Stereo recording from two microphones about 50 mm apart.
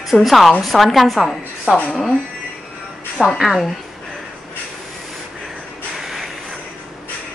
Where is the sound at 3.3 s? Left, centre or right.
Centre.